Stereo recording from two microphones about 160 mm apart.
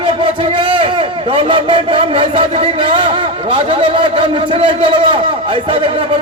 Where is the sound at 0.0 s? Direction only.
35° right (ahead or behind).